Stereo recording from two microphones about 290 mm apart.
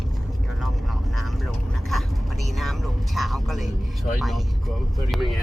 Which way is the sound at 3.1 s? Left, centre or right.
Centre.